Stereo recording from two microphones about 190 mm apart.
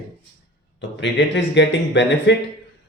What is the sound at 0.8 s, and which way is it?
Speech, 70° left (ahead or behind).